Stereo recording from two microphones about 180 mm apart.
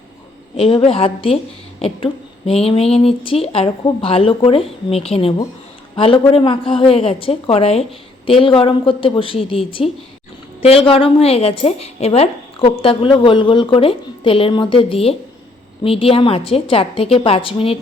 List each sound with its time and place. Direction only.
0.5 s a woman's voice: 35° left (ahead or behind)